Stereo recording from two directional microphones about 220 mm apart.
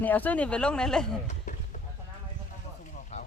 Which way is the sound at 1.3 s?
35° left (ahead or behind).